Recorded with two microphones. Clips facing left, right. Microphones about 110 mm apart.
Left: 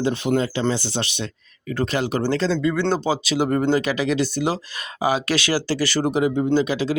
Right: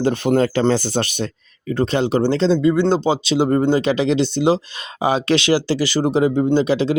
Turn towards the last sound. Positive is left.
turn(degrees=-30)  # may be behind; listen again after turning